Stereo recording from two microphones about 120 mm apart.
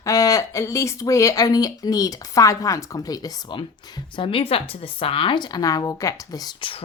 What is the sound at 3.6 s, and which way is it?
Speech, 45° left (ahead or behind).